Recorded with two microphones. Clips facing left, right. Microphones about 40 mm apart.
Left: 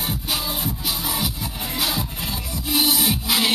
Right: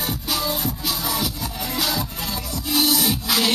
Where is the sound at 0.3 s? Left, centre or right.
Centre.